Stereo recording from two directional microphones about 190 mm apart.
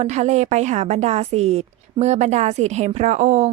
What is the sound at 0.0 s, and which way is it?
A woman's voice, 35° right (ahead or behind).